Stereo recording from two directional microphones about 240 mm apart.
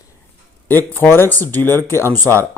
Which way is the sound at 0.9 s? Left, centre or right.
Centre.